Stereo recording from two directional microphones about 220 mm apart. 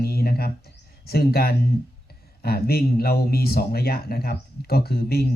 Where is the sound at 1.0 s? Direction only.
45° left (ahead or behind).